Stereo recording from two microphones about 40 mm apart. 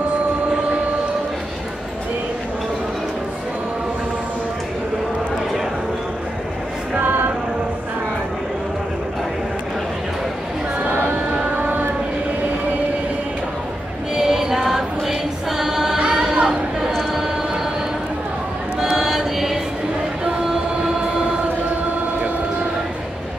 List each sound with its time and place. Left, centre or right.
11.5 s music: right
14.1 s choir: centre
16.0 s singing: centre
18.8 s chant: centre